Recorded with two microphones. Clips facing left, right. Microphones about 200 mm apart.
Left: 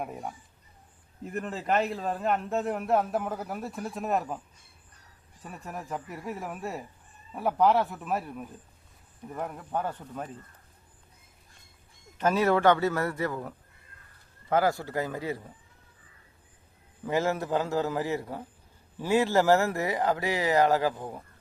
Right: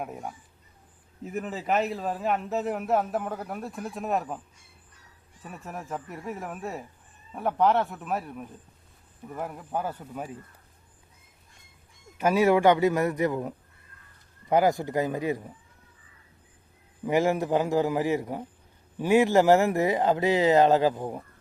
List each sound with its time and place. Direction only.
0.0 s a man's voice: centre (ahead or behind)
5.4 s a man's voice: centre (ahead or behind)
12.1 s speech: 10° right (ahead or behind)
14.5 s speech: 15° right (ahead or behind)
17.1 s speech: 15° right (ahead or behind)